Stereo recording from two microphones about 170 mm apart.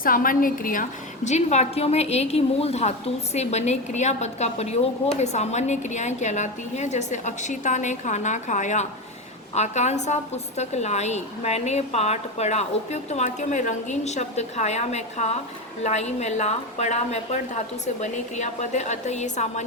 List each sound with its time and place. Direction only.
0.0 s a woman's voice: 55° left (ahead or behind)